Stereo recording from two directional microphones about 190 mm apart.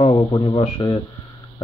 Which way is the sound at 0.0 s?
20° left (ahead or behind).